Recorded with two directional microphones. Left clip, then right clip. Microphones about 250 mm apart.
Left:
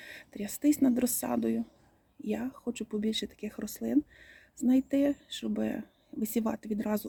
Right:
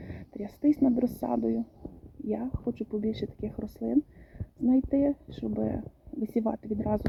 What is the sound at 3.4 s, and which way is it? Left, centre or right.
Speech, left.